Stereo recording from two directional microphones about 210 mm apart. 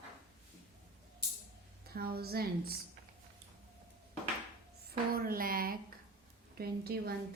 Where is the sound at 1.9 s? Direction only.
50° right (ahead or behind).